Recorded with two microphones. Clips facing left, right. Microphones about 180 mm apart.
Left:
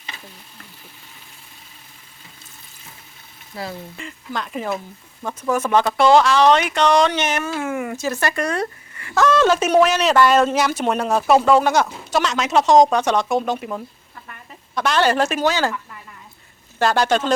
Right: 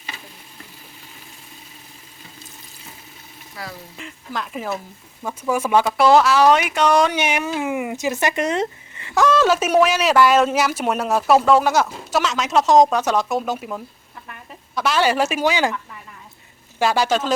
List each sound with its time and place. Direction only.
3.5 s speech: 25° left (ahead or behind)
3.9 s speech: centre (ahead or behind); by 9.2 s 20° right (ahead or behind)
9.2 s speech: 5° right (ahead or behind)
16.7 s speech: 5° right (ahead or behind)